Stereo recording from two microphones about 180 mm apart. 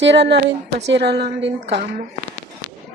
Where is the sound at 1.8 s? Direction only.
40° right (ahead or behind).